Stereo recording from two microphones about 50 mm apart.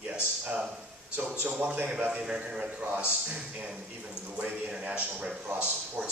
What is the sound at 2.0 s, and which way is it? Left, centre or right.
A man's voice, right.